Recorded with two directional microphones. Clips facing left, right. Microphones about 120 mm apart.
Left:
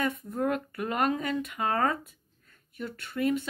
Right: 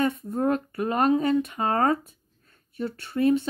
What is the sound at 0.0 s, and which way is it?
Speech, 25° right (ahead or behind).